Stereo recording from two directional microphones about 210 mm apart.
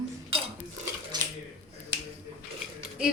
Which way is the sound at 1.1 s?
20° right (ahead or behind).